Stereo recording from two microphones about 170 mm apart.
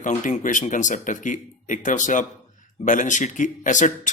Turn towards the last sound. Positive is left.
turn(degrees=45)  # may be behind; listen again after turning